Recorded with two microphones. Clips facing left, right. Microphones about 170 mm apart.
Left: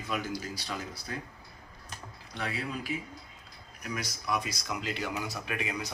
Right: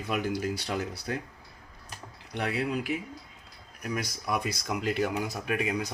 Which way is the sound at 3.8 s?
50° right (ahead or behind).